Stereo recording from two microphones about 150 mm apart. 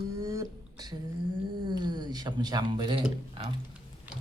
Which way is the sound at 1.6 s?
30° right (ahead or behind).